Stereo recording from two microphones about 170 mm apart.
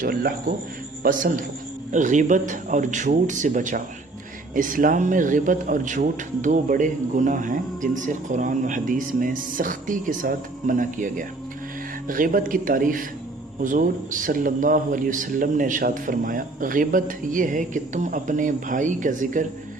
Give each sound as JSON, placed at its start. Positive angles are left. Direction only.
{"t": 0.0, "sound": "speech", "side_deg": -60}
{"t": 1.9, "sound": "speech", "side_deg": -45}